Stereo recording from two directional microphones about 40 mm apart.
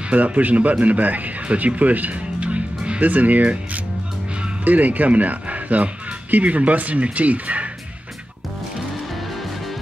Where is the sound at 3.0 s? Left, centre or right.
Right.